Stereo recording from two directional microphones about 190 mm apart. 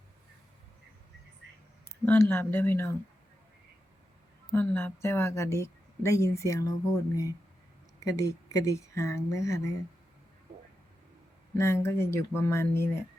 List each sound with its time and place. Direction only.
2.0 s speech: 10° left (ahead or behind)
4.5 s speech: 10° left (ahead or behind)
11.5 s speech: 15° left (ahead or behind)